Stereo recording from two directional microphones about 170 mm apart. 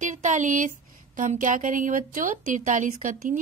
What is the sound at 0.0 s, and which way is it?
Speech, 45° right (ahead or behind).